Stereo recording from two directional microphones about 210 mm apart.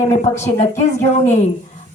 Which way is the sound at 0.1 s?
30° left (ahead or behind).